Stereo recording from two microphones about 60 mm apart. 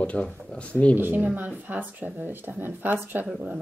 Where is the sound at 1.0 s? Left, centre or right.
Right.